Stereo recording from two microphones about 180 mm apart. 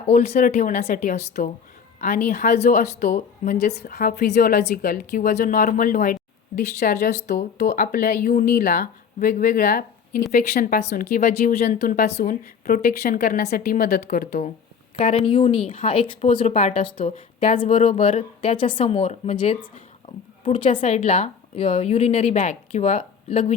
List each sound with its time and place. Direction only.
0.1 s speech: 35° left (ahead or behind)
3.8 s speech: 55° left (ahead or behind)
11.9 s a woman's voice: 60° left (ahead or behind)
14.9 s speech: 35° left (ahead or behind)